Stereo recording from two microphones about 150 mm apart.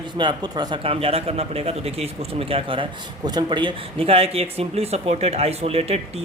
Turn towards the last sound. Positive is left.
turn(degrees=-45)  # may be behind; listen again after turning